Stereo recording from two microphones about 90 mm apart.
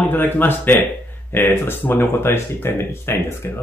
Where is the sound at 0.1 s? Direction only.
20° left (ahead or behind).